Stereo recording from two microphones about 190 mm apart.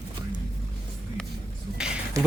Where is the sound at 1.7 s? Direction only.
5° right (ahead or behind).